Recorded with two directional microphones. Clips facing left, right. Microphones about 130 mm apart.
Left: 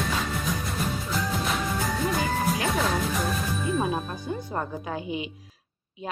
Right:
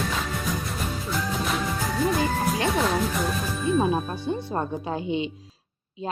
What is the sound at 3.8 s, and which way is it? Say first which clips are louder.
Music: right 4 dB; 30° right (ahead or behind).